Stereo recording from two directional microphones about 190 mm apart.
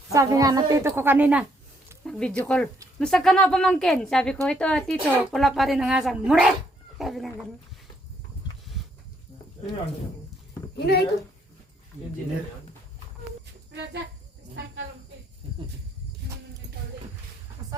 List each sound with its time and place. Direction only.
0.1 s a woman's voice: 15° right (ahead or behind)
2.0 s speech: 5° left (ahead or behind)
10.8 s speech: 60° left (ahead or behind)
15.4 s a sound: 30° right (ahead or behind)
17.6 s music: 40° right (ahead or behind)